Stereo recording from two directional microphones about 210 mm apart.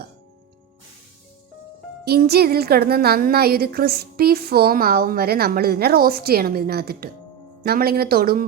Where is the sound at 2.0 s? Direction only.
50° right (ahead or behind).